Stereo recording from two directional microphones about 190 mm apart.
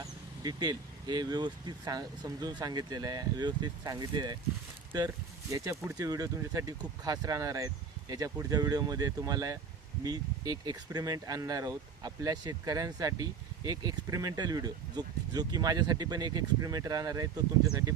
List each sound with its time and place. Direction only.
0.0 s speech: 20° right (ahead or behind)